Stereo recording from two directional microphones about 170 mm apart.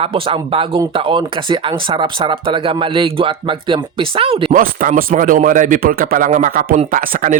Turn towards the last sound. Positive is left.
turn(degrees=-50)  # may be behind; listen again after turning